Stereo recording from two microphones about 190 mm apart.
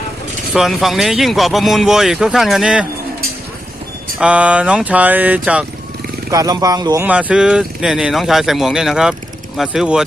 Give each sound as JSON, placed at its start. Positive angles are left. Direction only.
{"t": 0.5, "sound": "speech", "side_deg": 0}
{"t": 4.2, "sound": "speech", "side_deg": -5}
{"t": 6.3, "sound": "speech", "side_deg": -20}
{"t": 7.1, "sound": "speech", "side_deg": -5}